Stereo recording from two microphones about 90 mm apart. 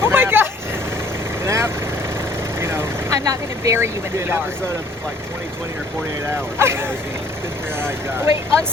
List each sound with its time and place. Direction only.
0.0 s vehicle: 25° right (ahead or behind)
1.5 s vehicle: 30° right (ahead or behind)
3.2 s speech: 40° right (ahead or behind)
6.6 s speech: 25° right (ahead or behind)